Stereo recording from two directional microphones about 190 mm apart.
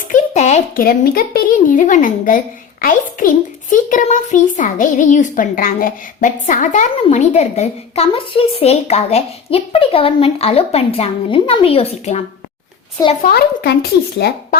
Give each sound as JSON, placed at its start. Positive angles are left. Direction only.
{"t": 0.1, "sound": "speech", "side_deg": 40}
{"t": 3.7, "sound": "a child's voice", "side_deg": 40}
{"t": 13.2, "sound": "speech", "side_deg": 55}